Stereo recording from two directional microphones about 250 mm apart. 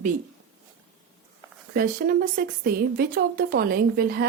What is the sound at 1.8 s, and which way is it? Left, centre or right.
Speech, right.